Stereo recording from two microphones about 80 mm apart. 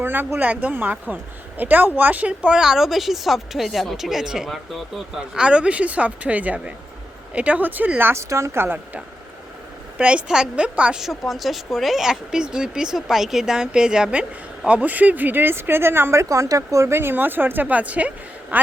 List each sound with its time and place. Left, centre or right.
0.0 s speech: right
10.0 s speech: centre
11.0 s speech: centre; by 16.2 s right
16.3 s a man's voice: right